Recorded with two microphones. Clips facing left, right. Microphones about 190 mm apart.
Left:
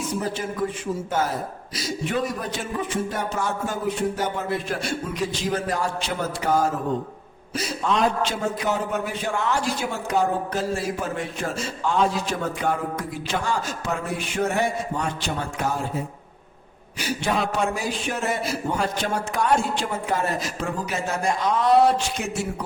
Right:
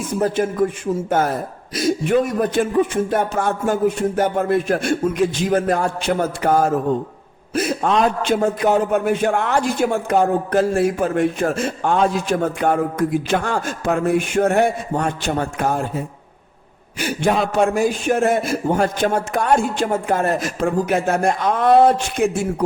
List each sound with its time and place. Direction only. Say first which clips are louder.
0.2 s a man's voice: right 12 dB; 55° right (ahead or behind)
1.7 s a man's voice: right 10 dB; 55° right (ahead or behind)
17.0 s a man's voice: right 6 dB; 50° right (ahead or behind)